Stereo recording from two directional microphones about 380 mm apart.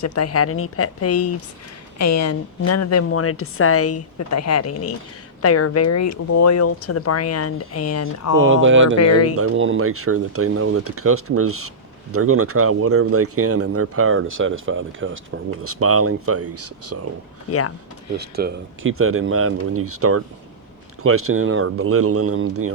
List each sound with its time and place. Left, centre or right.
0.0 s a woman's voice: left
8.4 s speech: right
9.0 s a woman's voice: left
9.3 s speech: right
17.5 s a woman's voice: left
18.2 s speech: right